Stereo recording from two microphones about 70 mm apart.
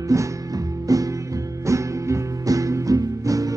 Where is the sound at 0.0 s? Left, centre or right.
Right.